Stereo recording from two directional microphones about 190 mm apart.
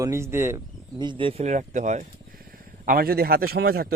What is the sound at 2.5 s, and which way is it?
A man's voice, 50° right (ahead or behind).